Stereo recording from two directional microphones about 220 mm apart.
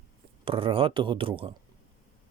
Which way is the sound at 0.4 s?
25° right (ahead or behind).